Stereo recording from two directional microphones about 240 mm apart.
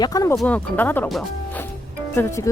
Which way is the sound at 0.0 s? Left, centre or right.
Centre.